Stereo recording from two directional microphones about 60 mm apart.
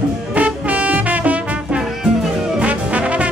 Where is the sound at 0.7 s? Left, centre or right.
Right.